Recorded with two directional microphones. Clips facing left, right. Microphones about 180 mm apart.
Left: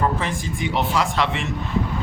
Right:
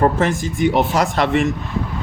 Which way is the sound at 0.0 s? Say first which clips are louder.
Right 6 dB; 45° right (ahead or behind).